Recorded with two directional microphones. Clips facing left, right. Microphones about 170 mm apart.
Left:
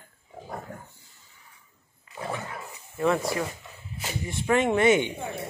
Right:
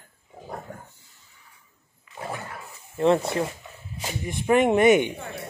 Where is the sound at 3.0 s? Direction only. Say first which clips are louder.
Right 4 dB; 25° right (ahead or behind).